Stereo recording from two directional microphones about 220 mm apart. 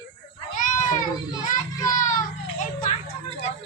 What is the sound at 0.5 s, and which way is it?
Children playing, 35° left (ahead or behind).